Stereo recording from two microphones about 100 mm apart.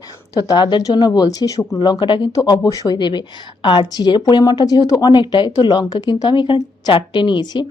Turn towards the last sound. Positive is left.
turn(degrees=50)  # may be behind; listen again after turning